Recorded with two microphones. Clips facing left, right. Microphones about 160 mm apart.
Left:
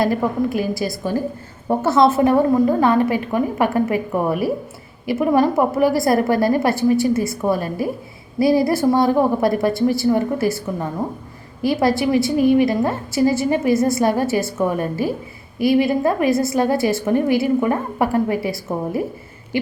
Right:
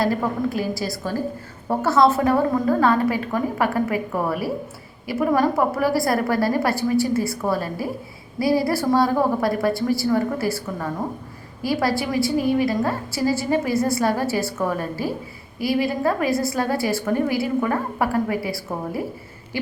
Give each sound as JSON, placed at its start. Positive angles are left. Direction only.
{"t": 0.5, "sound": "a woman's voice", "side_deg": 15}